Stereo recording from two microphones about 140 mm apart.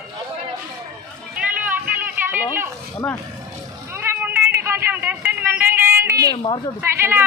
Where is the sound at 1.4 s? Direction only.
10° right (ahead or behind).